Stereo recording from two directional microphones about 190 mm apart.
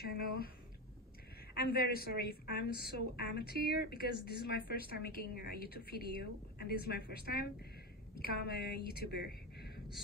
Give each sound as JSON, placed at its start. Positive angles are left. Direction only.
{"t": 0.0, "sound": "speech", "side_deg": 55}
{"t": 1.5, "sound": "a woman's voice", "side_deg": 55}